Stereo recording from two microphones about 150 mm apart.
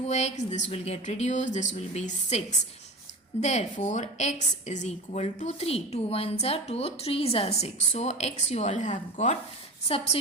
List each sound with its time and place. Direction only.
0.0 s a woman's voice: 45° left (ahead or behind)